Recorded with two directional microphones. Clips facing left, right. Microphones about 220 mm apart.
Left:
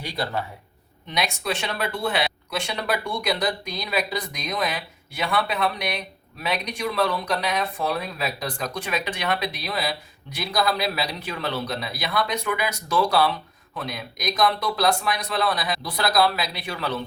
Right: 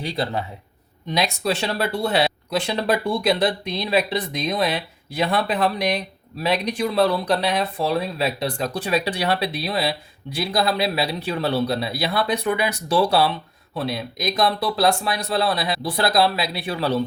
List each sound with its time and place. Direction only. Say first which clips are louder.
0.0 s speech: right 3 dB; 25° right (ahead or behind)
1.1 s speech: right 4 dB; 35° right (ahead or behind)